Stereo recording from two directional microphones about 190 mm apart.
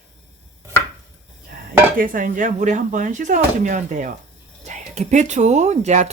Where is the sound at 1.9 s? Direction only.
45° right (ahead or behind).